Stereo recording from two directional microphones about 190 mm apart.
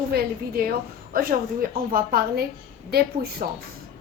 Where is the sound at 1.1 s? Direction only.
50° right (ahead or behind).